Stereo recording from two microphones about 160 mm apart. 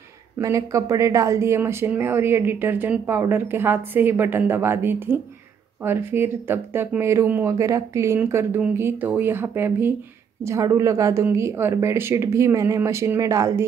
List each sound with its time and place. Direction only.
0.4 s speech: 20° right (ahead or behind)